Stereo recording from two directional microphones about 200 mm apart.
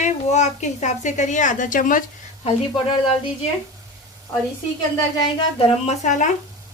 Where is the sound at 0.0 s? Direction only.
35° left (ahead or behind).